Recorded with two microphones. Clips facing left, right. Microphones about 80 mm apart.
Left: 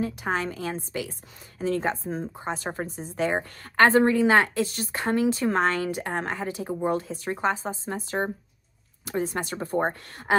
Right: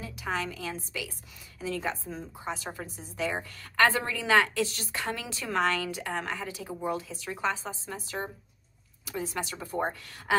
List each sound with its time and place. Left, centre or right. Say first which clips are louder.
0.0 s a woman's voice: left 6 dB; left